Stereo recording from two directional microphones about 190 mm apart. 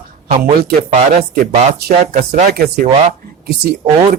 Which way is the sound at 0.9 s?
40° right (ahead or behind).